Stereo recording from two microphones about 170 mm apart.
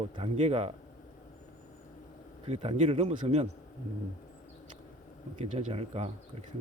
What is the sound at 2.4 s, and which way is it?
Speech, 40° right (ahead or behind).